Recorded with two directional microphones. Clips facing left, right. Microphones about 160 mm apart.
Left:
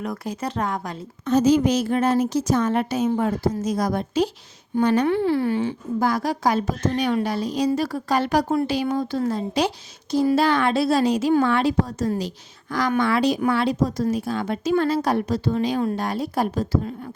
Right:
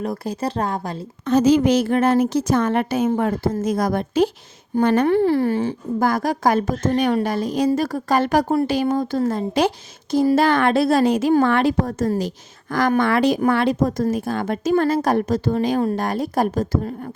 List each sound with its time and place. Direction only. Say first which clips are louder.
0.0 s speech: right 4 dB; 30° right (ahead or behind)
1.2 s a woman's voice: right 2 dB; 75° right (ahead or behind); by 17.1 s 45° right (ahead or behind)